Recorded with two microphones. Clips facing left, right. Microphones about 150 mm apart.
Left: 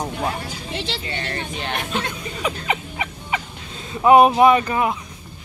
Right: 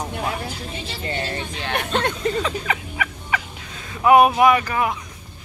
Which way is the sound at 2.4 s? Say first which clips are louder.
Left 1 dB; 20° left (ahead or behind).